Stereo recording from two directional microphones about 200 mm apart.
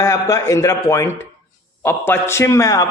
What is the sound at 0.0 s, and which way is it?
A man's voice, 15° left (ahead or behind).